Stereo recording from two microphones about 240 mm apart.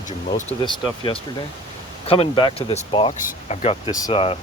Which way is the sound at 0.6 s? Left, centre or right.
Left.